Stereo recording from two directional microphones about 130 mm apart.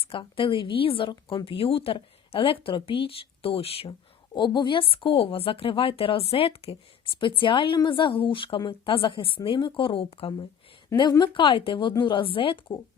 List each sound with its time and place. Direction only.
0.0 s a woman's voice: 40° left (ahead or behind)
4.4 s a woman's voice: 35° left (ahead or behind)